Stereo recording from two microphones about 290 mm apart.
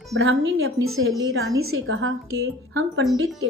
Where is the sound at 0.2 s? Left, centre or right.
Right.